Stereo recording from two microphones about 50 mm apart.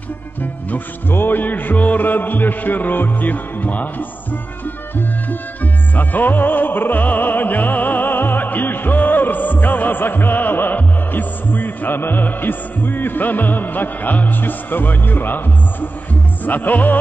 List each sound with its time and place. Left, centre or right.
0.4 s music: left